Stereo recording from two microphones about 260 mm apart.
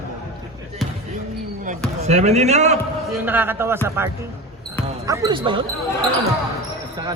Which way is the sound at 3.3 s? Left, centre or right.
Centre.